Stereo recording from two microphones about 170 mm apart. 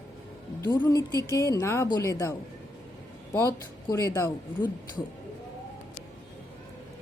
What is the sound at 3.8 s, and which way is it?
Speech, 20° left (ahead or behind).